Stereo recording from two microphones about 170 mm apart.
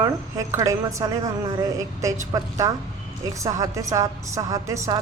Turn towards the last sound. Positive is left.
turn(degrees=-20)  # may be behind; listen again after turning